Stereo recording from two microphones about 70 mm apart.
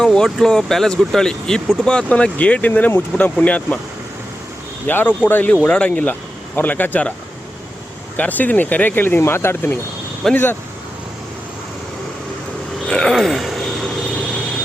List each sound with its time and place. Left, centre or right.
0.0 s a sound: centre
0.3 s speech: centre
4.9 s speech: left
5.6 s speech: centre
8.1 s speech: left
12.9 s speech: centre
13.1 s a sound: centre